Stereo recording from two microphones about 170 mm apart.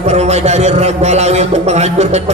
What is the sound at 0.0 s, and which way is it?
Music, 40° right (ahead or behind).